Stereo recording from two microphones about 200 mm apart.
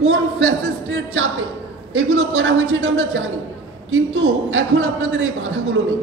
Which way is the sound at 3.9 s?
75° right (ahead or behind).